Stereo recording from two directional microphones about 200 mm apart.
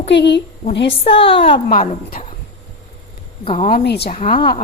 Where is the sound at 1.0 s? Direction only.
25° left (ahead or behind).